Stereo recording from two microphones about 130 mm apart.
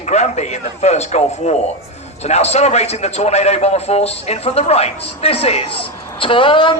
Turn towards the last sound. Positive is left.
turn(degrees=40)  # may be behind; listen again after turning